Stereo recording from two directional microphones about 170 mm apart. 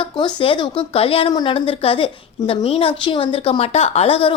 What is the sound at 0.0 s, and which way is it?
Speech, 30° left (ahead or behind).